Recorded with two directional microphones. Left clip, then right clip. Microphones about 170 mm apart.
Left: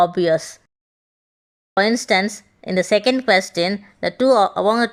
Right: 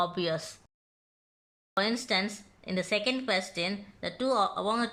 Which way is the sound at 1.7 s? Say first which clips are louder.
Left 12 dB; 40° left (ahead or behind).